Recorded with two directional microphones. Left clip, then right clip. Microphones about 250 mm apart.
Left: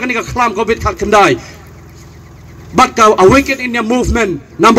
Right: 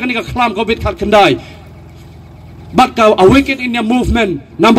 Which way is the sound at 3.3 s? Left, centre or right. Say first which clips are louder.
Left 1 dB; right.